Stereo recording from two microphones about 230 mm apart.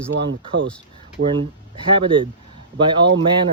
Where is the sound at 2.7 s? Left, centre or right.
Right.